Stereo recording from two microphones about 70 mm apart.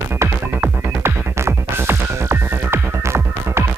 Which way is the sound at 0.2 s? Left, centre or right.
Right.